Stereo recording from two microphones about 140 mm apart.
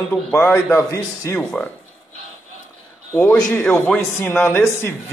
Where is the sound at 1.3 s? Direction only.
5° left (ahead or behind).